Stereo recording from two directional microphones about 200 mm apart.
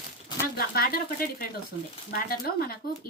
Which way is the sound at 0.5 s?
50° left (ahead or behind).